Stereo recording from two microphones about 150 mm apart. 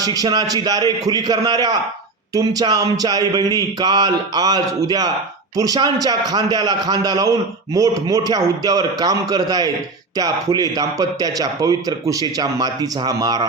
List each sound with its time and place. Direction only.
0.0 s a man's voice: 25° right (ahead or behind)